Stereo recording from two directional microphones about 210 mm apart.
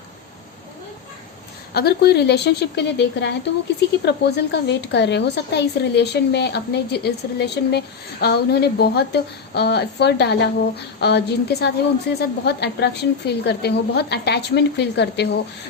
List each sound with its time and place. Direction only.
1.7 s a woman's voice: 50° left (ahead or behind)